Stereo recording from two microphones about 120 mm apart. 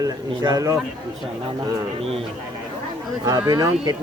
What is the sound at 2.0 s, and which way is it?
Speech, 55° right (ahead or behind).